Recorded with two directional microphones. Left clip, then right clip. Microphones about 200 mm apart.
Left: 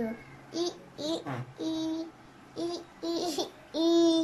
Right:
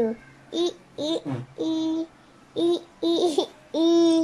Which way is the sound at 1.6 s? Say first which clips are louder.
Right 7 dB; 20° right (ahead or behind).